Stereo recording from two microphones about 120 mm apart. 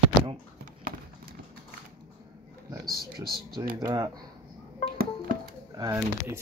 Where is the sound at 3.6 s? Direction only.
35° right (ahead or behind).